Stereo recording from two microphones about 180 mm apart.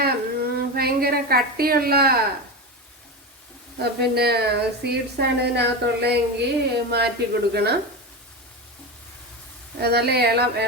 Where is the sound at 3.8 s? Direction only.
60° right (ahead or behind).